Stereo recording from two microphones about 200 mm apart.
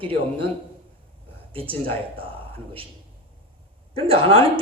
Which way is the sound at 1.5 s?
25° right (ahead or behind).